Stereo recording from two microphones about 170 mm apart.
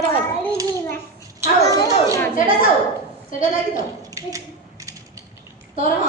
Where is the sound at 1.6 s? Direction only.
20° left (ahead or behind).